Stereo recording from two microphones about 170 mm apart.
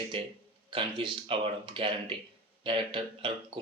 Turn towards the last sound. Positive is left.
turn(degrees=-30)  # may be behind; listen again after turning